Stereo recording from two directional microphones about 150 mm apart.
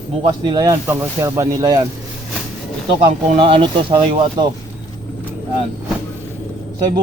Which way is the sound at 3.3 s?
35° right (ahead or behind).